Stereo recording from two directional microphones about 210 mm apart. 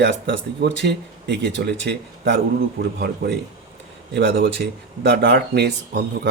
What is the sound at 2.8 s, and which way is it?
Speech, 45° right (ahead or behind).